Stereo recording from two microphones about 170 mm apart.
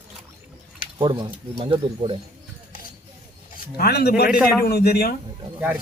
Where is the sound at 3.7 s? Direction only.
70° left (ahead or behind).